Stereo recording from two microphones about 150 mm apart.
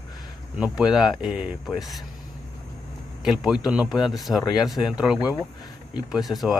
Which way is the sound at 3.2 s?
5° right (ahead or behind).